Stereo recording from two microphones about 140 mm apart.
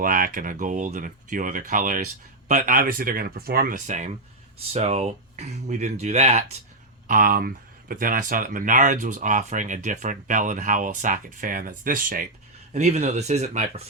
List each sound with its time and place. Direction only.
0.0 s speech: 75° right (ahead or behind); by 4.2 s 60° right (ahead or behind)
4.7 s speech: 50° right (ahead or behind)
7.1 s speech: 80° right
12.7 s speech: 50° right (ahead or behind)